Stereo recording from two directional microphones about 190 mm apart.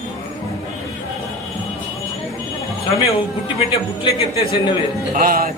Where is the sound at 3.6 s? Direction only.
30° left (ahead or behind).